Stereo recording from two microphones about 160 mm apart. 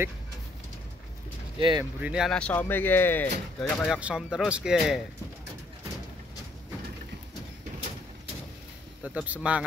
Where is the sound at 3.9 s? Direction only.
5° right (ahead or behind).